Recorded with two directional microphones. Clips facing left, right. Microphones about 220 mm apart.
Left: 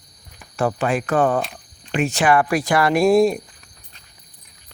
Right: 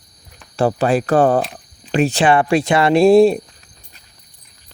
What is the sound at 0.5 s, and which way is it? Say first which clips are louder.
Speech: right 5 dB; 35° right (ahead or behind).